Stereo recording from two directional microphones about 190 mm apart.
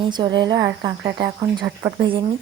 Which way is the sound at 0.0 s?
25° right (ahead or behind).